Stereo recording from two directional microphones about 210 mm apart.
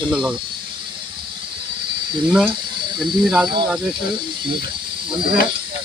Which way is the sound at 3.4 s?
20° right (ahead or behind).